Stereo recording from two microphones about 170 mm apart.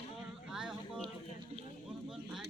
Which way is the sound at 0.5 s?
5° right (ahead or behind).